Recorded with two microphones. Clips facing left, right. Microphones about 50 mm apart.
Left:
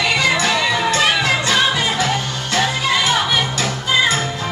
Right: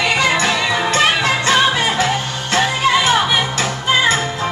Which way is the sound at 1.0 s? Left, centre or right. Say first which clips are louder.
Right 1 dB; right.